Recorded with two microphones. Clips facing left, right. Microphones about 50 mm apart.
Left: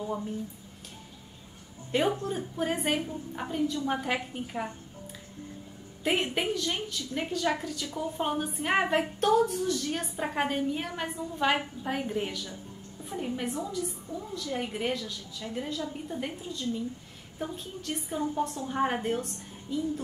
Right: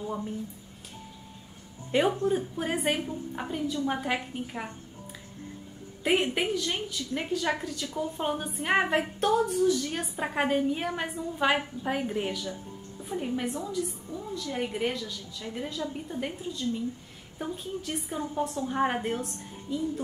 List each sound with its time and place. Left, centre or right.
1.9 s a woman's voice: centre
6.0 s a woman's voice: centre